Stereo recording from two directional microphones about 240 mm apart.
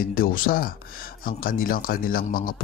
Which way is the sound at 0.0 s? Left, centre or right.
Left.